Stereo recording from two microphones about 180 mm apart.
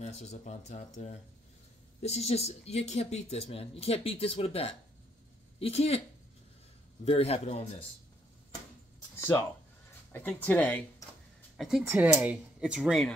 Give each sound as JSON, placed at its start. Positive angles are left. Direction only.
{"t": 0.0, "sound": "speech", "side_deg": 40}
{"t": 7.1, "sound": "speech", "side_deg": 35}
{"t": 9.2, "sound": "speech", "side_deg": 15}
{"t": 11.5, "sound": "a woman's voice", "side_deg": 0}